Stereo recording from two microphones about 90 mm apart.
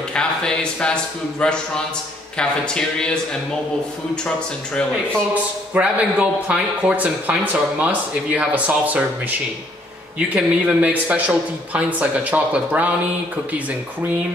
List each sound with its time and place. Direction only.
0.1 s speech: 10° left (ahead or behind)
5.3 s speech: 15° right (ahead or behind)
10.1 s speech: 15° right (ahead or behind)